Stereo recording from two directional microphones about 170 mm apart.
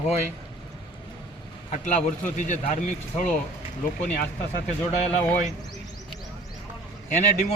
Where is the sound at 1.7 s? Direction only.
40° left (ahead or behind).